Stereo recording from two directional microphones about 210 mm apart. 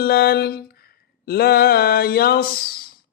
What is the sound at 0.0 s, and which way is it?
Speech, 50° left (ahead or behind).